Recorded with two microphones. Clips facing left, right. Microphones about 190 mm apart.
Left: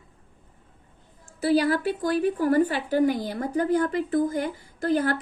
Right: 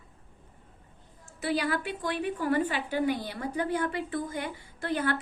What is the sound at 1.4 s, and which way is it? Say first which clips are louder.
A woman's voice: left 8 dB; 35° left (ahead or behind).